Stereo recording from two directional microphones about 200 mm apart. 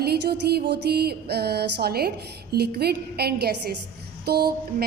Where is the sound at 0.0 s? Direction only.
50° right (ahead or behind).